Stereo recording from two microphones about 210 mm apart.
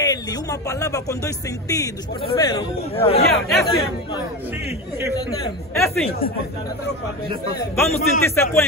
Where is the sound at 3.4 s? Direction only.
Centre (ahead or behind).